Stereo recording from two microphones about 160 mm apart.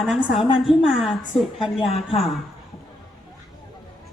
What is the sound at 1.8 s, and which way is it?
Speech, 35° left (ahead or behind).